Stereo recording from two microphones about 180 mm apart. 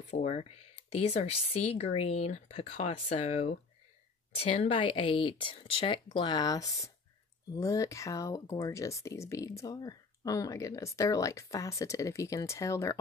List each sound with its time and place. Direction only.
0.1 s speech: 35° left (ahead or behind); by 13.0 s 15° left (ahead or behind)